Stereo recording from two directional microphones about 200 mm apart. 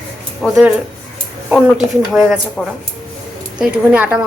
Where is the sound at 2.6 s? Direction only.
Centre (ahead or behind).